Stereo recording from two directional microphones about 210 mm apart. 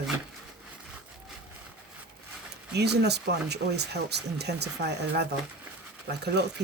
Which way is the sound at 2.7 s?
50° right (ahead or behind).